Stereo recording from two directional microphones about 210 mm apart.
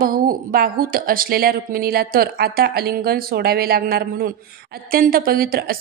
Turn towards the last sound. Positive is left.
turn(degrees=-45)  # may be behind; listen again after turning